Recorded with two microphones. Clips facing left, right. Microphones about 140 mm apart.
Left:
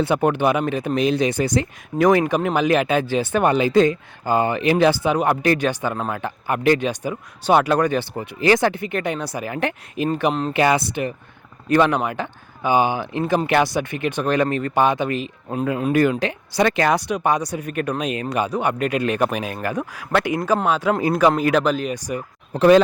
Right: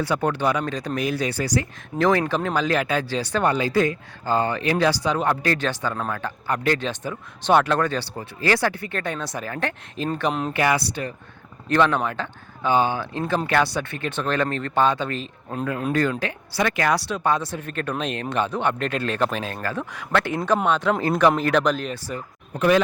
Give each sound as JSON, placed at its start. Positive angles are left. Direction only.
{"t": 0.0, "sound": "speech", "side_deg": 20}
{"t": 22.5, "sound": "speech", "side_deg": 35}